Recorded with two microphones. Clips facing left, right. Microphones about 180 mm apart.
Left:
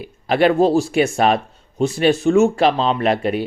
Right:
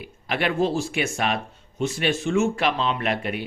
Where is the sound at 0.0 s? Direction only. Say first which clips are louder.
Left 10 dB; 35° left (ahead or behind).